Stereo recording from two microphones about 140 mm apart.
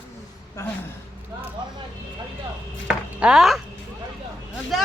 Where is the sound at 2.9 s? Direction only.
5° right (ahead or behind).